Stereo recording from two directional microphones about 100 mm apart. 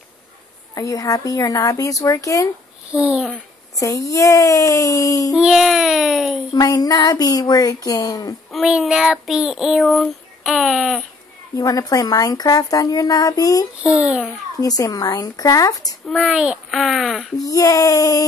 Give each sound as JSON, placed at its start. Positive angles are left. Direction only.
{"t": 0.7, "sound": "speech", "side_deg": 35}
{"t": 2.9, "sound": "a child's voice", "side_deg": -10}
{"t": 3.8, "sound": "speech", "side_deg": 35}
{"t": 5.4, "sound": "child singing", "side_deg": -5}
{"t": 6.5, "sound": "speech", "side_deg": 40}
{"t": 8.6, "sound": "child singing", "side_deg": -5}
{"t": 11.5, "sound": "speech", "side_deg": 35}
{"t": 13.8, "sound": "a child's voice", "side_deg": -5}
{"t": 14.6, "sound": "speech", "side_deg": 35}
{"t": 16.3, "sound": "child singing", "side_deg": -10}
{"t": 17.5, "sound": "speech", "side_deg": 35}